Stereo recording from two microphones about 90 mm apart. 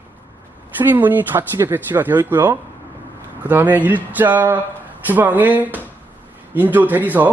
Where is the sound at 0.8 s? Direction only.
20° right (ahead or behind).